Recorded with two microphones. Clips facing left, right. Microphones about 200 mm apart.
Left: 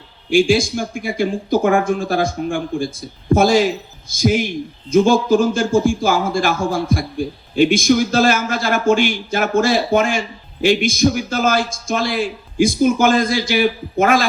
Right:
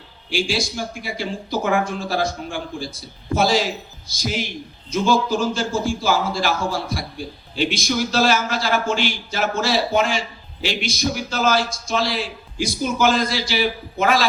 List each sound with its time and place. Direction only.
0.3 s a man's voice: 50° left (ahead or behind)